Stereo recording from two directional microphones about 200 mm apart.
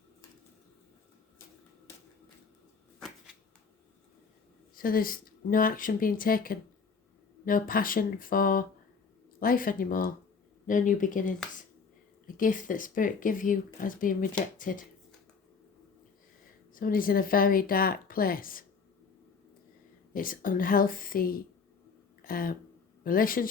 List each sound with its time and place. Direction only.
4.7 s a woman's voice: 45° left (ahead or behind)
12.4 s a woman's voice: 40° left (ahead or behind)
16.7 s a woman's voice: 45° left (ahead or behind)
20.1 s a woman's voice: 45° left (ahead or behind)